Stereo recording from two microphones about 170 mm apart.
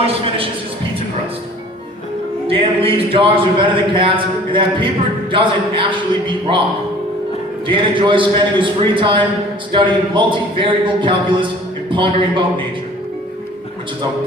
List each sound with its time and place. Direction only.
0.0 s a sound: 35° right (ahead or behind)
2.5 s a man's voice: 30° right (ahead or behind)
7.7 s a man's voice: 30° right (ahead or behind)